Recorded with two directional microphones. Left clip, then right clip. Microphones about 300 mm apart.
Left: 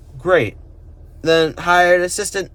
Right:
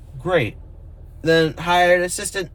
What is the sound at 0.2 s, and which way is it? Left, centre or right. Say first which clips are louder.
A man's voice: left 5 dB; centre.